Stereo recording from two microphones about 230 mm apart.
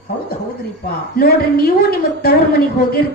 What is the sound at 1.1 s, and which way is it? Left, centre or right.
Speech, left.